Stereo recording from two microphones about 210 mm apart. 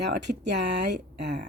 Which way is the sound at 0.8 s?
55° right (ahead or behind).